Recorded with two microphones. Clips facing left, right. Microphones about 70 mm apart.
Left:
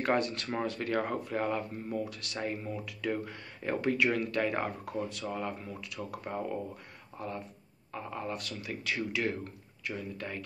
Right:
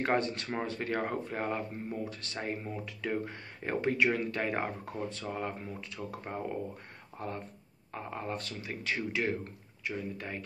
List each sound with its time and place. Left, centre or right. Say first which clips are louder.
0.0 s speech: even; right
7.2 s speech: even; right